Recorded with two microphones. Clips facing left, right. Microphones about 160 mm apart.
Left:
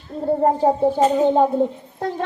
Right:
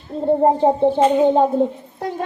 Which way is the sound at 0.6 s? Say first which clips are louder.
Right 2 dB; 25° right (ahead or behind).